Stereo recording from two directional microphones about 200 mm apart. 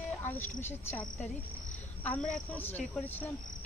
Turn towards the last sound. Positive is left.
turn(degrees=10)  # may be behind; listen again after turning